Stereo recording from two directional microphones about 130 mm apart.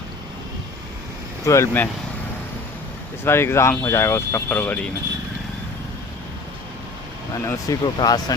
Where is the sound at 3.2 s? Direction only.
20° left (ahead or behind).